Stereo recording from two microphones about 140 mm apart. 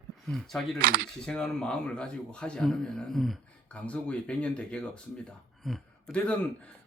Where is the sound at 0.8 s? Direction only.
90° right.